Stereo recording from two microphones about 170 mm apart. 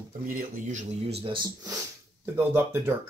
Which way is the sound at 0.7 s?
40° right (ahead or behind).